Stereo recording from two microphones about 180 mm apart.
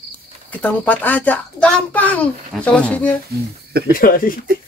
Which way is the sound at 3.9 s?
50° left (ahead or behind).